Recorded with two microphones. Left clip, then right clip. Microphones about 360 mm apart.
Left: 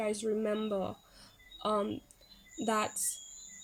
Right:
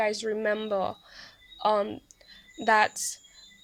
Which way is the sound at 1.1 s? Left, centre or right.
Centre.